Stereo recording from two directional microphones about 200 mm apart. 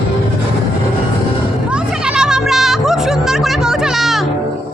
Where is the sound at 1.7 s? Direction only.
5° right (ahead or behind).